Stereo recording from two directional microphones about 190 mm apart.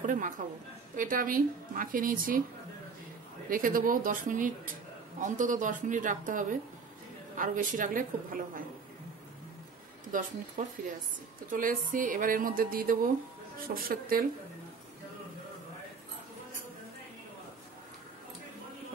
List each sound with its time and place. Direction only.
0.0 s a sound: 45° right (ahead or behind)
0.9 s speech: 45° right (ahead or behind)
3.4 s speech: 45° right (ahead or behind)
10.1 s speech: 45° right (ahead or behind)